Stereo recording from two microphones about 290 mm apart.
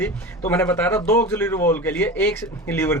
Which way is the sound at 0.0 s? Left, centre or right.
Centre.